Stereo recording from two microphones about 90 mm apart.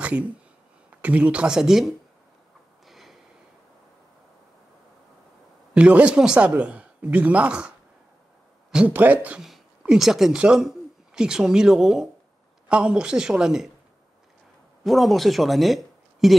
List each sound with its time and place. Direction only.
0.0 s a sound: 15° right (ahead or behind)
0.8 s speech: 15° right (ahead or behind)
2.9 s a sound: centre (ahead or behind)
5.8 s speech: 15° right (ahead or behind)
8.7 s speech: 20° right (ahead or behind)
9.4 s speech: 5° right (ahead or behind)
14.8 s speech: centre (ahead or behind)